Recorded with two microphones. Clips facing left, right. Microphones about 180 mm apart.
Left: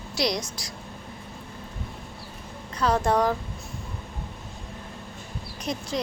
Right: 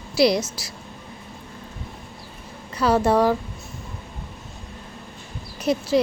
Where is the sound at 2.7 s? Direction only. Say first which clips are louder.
Right 4 dB; 5° right (ahead or behind).